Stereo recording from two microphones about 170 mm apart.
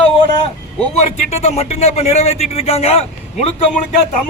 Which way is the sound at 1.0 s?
40° left (ahead or behind).